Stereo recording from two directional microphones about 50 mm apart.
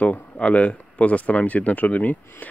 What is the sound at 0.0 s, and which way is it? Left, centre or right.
Speech, left.